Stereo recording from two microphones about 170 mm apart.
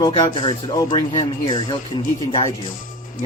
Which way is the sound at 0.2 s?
25° left (ahead or behind).